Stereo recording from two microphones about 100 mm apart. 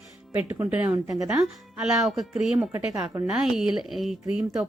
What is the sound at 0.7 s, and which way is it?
Speech, 15° right (ahead or behind).